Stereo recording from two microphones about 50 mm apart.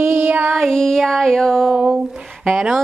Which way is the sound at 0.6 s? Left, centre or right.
Centre.